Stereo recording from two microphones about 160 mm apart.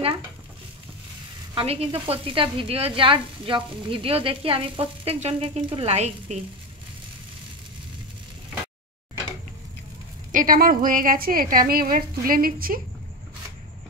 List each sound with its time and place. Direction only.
1.5 s sizzle: 35° right (ahead or behind)
10.3 s a woman's voice: 60° right (ahead or behind)